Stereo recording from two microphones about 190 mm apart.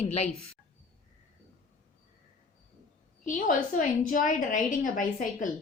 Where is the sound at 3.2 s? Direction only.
45° left (ahead or behind).